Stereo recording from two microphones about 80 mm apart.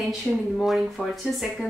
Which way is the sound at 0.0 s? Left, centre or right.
Centre.